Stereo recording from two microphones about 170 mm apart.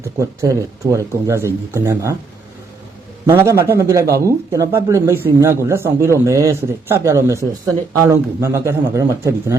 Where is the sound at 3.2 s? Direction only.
15° right (ahead or behind).